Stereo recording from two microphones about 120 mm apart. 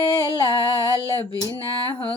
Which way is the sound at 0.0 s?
35° left (ahead or behind).